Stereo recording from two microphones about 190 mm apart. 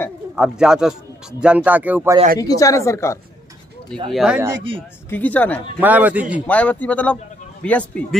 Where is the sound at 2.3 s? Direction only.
20° left (ahead or behind).